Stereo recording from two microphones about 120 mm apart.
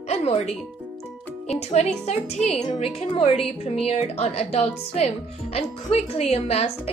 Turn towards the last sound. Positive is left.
turn(degrees=60)  # may be behind; listen again after turning